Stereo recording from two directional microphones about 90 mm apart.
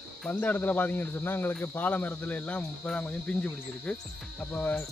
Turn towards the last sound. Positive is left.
turn(degrees=20)  # may be behind; listen again after turning